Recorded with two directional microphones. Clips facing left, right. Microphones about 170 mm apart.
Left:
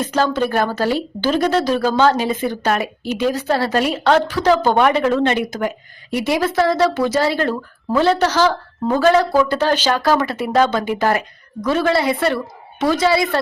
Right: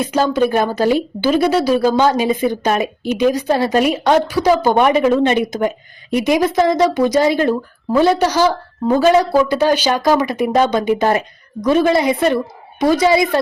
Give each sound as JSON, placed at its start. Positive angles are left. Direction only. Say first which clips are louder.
{"t": 0.0, "sound": "a woman's voice", "louder": "right 3 dB", "side_deg": -10}